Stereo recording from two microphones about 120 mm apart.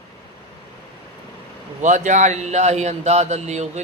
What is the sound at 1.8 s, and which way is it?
A man's voice, 90° right.